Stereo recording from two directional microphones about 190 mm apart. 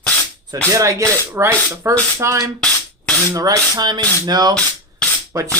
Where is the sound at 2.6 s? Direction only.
5° left (ahead or behind).